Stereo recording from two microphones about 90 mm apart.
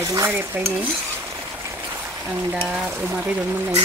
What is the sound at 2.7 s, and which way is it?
Frying, 15° right (ahead or behind).